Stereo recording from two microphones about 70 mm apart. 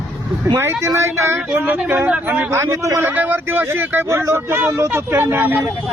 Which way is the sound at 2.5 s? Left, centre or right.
Right.